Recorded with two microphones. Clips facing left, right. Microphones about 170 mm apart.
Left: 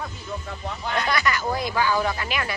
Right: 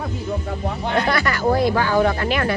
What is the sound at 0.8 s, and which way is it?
Speech, 25° right (ahead or behind).